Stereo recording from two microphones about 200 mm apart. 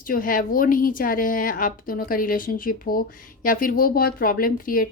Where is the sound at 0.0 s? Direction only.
45° left (ahead or behind).